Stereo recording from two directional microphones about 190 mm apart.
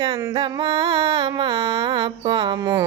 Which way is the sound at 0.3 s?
25° right (ahead or behind).